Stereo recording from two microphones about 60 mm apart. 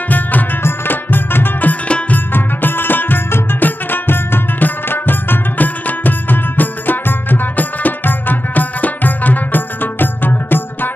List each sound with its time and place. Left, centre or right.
0.1 s music: left
2.1 s music: left